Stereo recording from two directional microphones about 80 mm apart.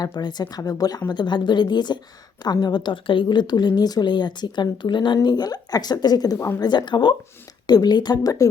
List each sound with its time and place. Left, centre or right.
0.0 s speech: left
6.6 s speech: left
7.7 s speech: left